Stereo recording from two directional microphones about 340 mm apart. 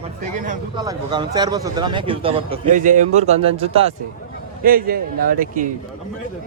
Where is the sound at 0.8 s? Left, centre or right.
Centre.